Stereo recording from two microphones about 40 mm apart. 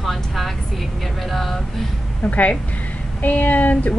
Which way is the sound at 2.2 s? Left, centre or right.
Left.